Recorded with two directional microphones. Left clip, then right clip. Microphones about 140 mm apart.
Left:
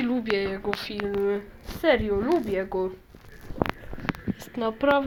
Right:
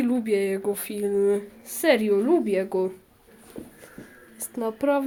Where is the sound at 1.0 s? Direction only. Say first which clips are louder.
Right 4 dB; 45° right (ahead or behind).